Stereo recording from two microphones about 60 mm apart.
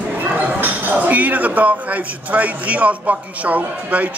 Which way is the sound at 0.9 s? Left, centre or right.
Right.